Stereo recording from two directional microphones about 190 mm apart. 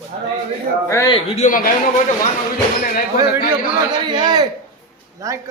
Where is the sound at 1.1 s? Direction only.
35° left (ahead or behind).